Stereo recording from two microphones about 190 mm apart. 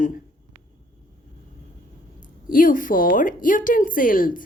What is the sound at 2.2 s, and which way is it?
A woman's voice, 45° left (ahead or behind).